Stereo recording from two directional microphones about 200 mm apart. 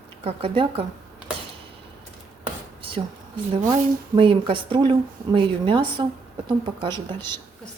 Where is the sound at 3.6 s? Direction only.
25° right (ahead or behind).